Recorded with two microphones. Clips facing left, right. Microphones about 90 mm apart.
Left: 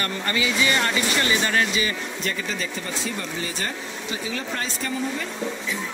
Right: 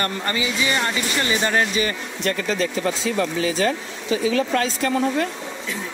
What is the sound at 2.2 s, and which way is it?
Speech, 65° right (ahead or behind).